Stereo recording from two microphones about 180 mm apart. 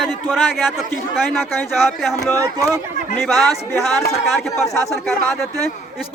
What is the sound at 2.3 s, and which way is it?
Speech, 20° right (ahead or behind).